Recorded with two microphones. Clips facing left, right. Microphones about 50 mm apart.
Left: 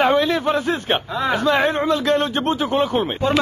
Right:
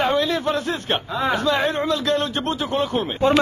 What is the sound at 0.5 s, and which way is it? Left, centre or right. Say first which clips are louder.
Speech: left 3 dB; centre.